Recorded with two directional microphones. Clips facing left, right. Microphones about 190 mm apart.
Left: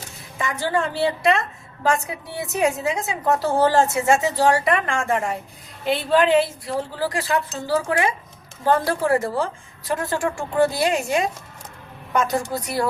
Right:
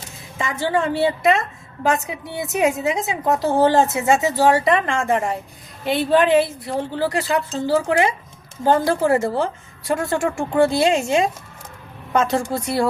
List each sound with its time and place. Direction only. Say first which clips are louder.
0.3 s a woman's voice: right 2 dB; 20° right (ahead or behind)